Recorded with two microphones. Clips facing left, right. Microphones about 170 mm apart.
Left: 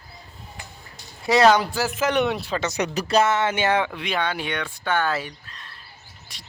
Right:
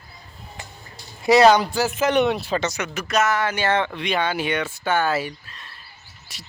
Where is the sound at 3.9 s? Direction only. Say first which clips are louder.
Right 2 dB; centre (ahead or behind).